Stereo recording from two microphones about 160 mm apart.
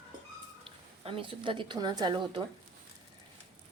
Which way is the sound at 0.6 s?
35° right (ahead or behind).